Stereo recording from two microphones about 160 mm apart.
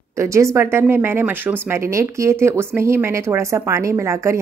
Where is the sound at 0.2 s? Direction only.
20° right (ahead or behind).